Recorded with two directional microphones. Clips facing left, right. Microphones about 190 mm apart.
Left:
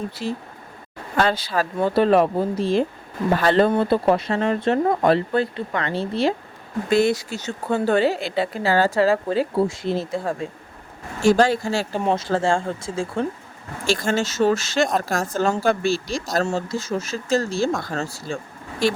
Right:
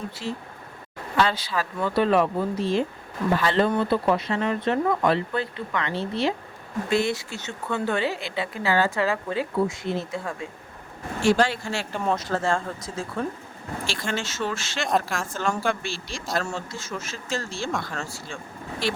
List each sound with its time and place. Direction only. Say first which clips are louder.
0.2 s speech: left 4 dB; 45° left (ahead or behind)
1.7 s speech: left 4 dB; 30° left (ahead or behind)
3.7 s speech: left 4 dB; 35° left (ahead or behind)
13.8 s speech: left 9 dB; 45° left (ahead or behind)